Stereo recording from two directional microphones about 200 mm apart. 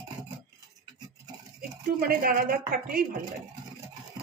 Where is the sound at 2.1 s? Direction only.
45° right (ahead or behind).